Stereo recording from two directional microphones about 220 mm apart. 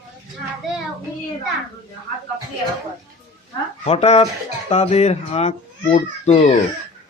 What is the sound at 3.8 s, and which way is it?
Speech, 30° left (ahead or behind).